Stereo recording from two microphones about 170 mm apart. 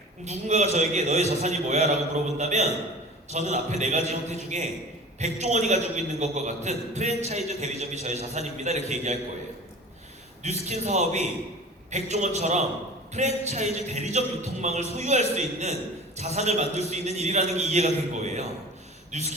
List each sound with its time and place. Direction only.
0.3 s a man's voice: 40° right (ahead or behind)
10.4 s a man's voice: 40° right (ahead or behind)